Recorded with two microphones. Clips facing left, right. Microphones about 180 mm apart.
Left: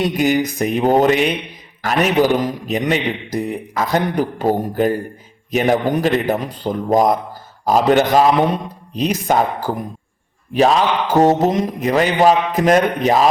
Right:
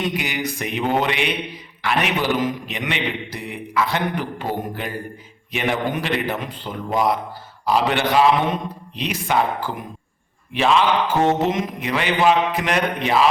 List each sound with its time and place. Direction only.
0.0 s a man's voice: 45° left (ahead or behind)